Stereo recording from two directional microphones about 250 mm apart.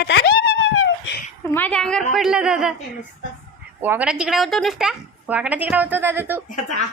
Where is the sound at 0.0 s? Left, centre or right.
Left.